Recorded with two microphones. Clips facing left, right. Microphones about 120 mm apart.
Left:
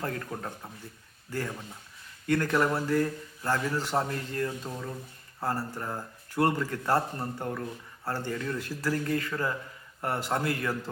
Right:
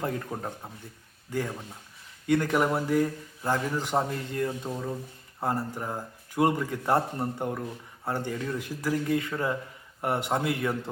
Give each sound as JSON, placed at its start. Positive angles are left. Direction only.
{"t": 0.0, "sound": "a man's voice", "side_deg": -15}